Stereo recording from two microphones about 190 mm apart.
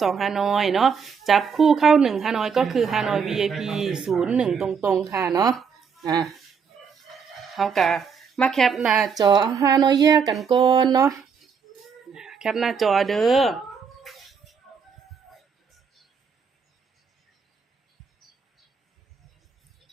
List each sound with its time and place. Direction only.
0.0 s speech: centre (ahead or behind)
5.0 s speech: 15° right (ahead or behind)
5.5 s a sound: centre (ahead or behind)
7.1 s speech: centre (ahead or behind)
9.1 s a woman's voice: 20° right (ahead or behind)
10.9 s speech: 15° right (ahead or behind)
12.1 s speech: 5° right (ahead or behind)
14.0 s dog: centre (ahead or behind)